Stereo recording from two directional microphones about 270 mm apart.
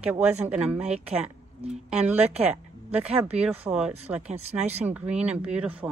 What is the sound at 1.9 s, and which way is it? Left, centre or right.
Speech, centre.